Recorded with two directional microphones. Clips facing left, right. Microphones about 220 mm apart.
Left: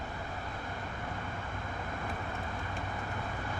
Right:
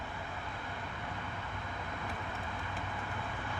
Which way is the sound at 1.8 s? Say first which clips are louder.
Left 3 dB; 45° left (ahead or behind).